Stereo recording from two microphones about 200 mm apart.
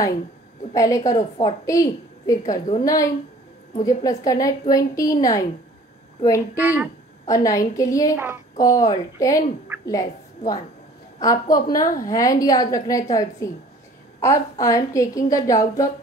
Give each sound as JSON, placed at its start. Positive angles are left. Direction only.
{"t": 0.7, "sound": "a woman's voice", "side_deg": 15}
{"t": 6.6, "sound": "speech", "side_deg": -10}
{"t": 7.2, "sound": "a woman's voice", "side_deg": 15}